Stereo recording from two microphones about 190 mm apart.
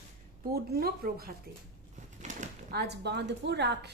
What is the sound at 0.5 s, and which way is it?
Speech, 55° right (ahead or behind).